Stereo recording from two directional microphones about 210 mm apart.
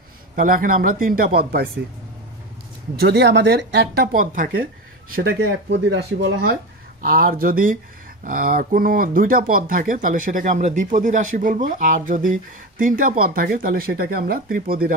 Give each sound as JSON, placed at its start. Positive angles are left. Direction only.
{"t": 0.4, "sound": "speech", "side_deg": -40}
{"t": 3.0, "sound": "speech", "side_deg": -55}
{"t": 5.7, "sound": "speech", "side_deg": -55}